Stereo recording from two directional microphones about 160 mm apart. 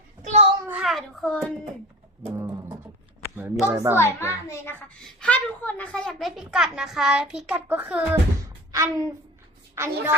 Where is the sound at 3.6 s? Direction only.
20° right (ahead or behind).